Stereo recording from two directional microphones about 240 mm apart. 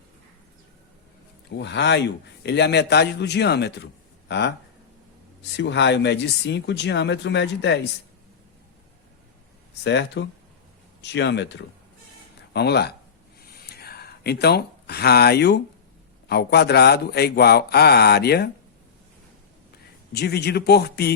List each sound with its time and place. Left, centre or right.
1.5 s speech: left
9.8 s speech: left
13.5 s a sound: left
16.3 s a man's voice: left
20.1 s speech: left